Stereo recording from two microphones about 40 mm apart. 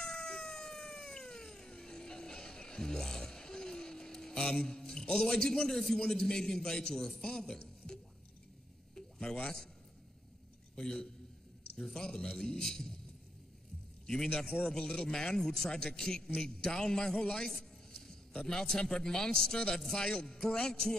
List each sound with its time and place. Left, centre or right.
0.0 s cat: centre
6.0 s speech: centre
7.6 s a sound: centre
10.8 s speech: centre
14.0 s a man's voice: centre
17.9 s a sound: centre
18.5 s speech: centre